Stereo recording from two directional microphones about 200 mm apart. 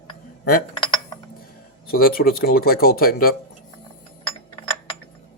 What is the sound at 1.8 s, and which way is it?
Speech, 45° left (ahead or behind).